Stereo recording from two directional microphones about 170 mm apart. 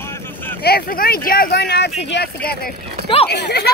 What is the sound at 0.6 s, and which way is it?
Speech, 65° left (ahead or behind).